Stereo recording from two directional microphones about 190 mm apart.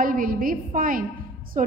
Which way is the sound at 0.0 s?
45° right (ahead or behind).